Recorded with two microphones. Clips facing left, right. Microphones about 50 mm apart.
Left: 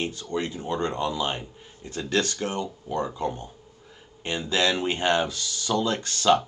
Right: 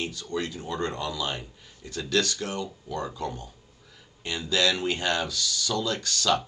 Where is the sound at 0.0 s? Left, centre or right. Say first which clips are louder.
Left 2 dB; left.